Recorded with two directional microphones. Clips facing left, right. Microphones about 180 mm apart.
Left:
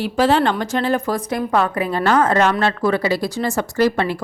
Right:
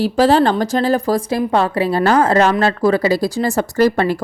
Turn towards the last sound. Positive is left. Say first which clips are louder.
# right 3 dB
turn(degrees=-45)  # may be behind; listen again after turning